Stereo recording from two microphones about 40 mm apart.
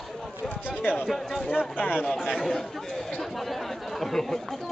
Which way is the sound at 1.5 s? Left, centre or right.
Left.